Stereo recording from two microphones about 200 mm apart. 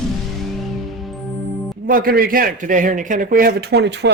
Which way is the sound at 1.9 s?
45° right (ahead or behind).